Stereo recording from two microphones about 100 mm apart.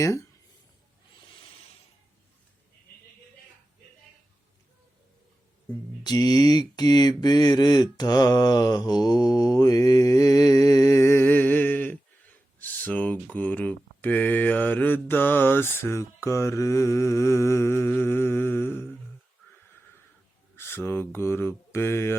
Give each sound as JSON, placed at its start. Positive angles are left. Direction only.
{"t": 6.0, "sound": "mantra", "side_deg": 45}
{"t": 12.5, "sound": "a sound", "side_deg": 15}
{"t": 13.3, "sound": "mantra", "side_deg": 15}
{"t": 20.6, "sound": "speech", "side_deg": 25}